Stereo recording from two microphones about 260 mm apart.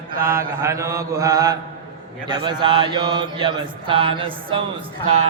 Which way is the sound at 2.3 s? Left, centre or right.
Centre.